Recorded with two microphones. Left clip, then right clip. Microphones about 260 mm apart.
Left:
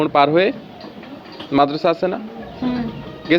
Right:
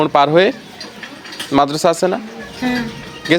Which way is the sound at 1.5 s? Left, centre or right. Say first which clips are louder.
Right 2 dB; right.